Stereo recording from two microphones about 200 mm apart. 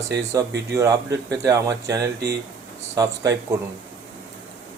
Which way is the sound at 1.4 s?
15° right (ahead or behind).